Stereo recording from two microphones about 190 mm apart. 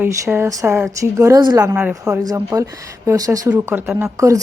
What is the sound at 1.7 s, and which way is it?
Speech, 5° right (ahead or behind).